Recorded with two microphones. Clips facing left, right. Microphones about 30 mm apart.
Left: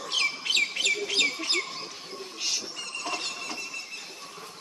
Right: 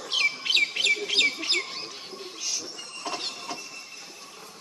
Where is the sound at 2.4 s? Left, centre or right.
Left.